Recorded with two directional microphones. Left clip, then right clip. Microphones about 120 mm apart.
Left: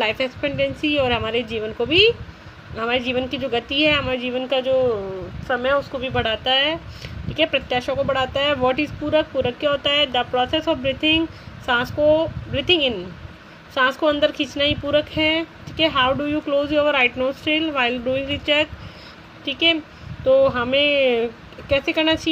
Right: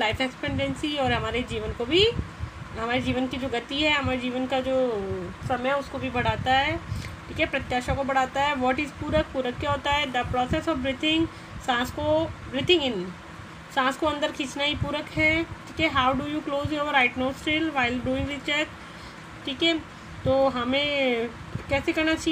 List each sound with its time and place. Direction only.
0.0 s speech: 70° left (ahead or behind)
2.8 s speech: 90° left
5.9 s speech: 90° left; by 22.3 s 75° left (ahead or behind)